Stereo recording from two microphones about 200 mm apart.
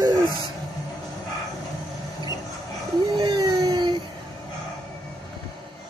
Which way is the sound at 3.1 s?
20° right (ahead or behind).